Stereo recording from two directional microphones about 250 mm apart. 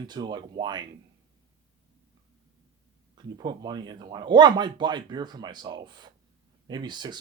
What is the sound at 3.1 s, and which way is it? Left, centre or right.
Speech, centre.